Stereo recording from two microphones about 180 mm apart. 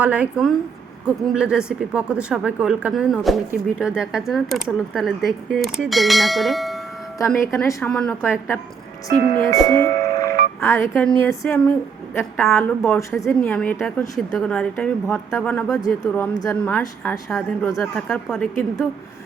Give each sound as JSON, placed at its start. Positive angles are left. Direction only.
{"t": 0.0, "sound": "a woman's voice", "side_deg": -5}
{"t": 7.3, "sound": "a woman's voice", "side_deg": 10}